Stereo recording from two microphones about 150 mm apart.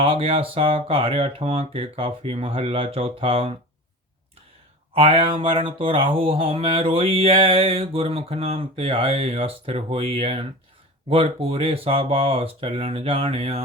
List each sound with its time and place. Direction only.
0.0 s mantra: 40° right (ahead or behind)
4.9 s mantra: 35° right (ahead or behind)